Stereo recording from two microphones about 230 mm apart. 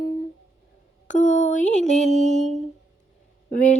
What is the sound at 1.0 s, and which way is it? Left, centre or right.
Female singing, left.